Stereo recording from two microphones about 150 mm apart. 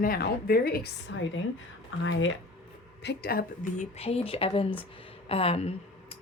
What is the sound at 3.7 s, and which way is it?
Speech, 45° left (ahead or behind).